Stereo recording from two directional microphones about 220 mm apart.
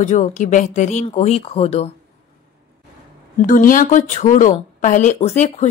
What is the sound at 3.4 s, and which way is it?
A woman's voice, 40° left (ahead or behind).